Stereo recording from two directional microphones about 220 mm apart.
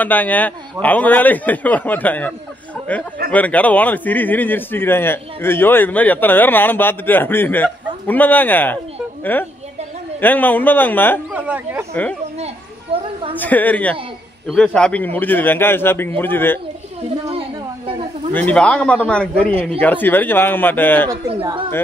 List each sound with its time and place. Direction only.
0.0 s speech: 10° left (ahead or behind)
11.3 s speech: 10° right (ahead or behind)
11.9 s speech: 5° left (ahead or behind)
12.9 s a sound: 25° right (ahead or behind)
13.4 s speech: 5° left (ahead or behind)
17.3 s a sound: 25° right (ahead or behind)
18.3 s speech: 5° left (ahead or behind)
21.3 s speech: 25° right (ahead or behind)